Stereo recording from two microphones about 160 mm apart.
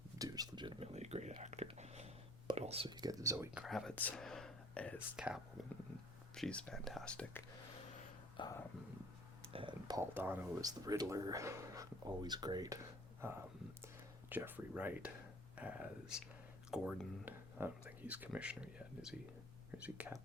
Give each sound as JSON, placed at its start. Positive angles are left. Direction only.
{"t": 0.2, "sound": "whispering", "side_deg": -25}
{"t": 3.5, "sound": "speech", "side_deg": 0}
{"t": 4.9, "sound": "speech", "side_deg": -5}
{"t": 6.3, "sound": "speech", "side_deg": 5}
{"t": 8.4, "sound": "speech", "side_deg": 30}
{"t": 9.5, "sound": "a sound", "side_deg": -30}
{"t": 10.0, "sound": "speech", "side_deg": -15}
{"t": 13.8, "sound": "a sound", "side_deg": -10}
{"t": 15.5, "sound": "speech", "side_deg": -10}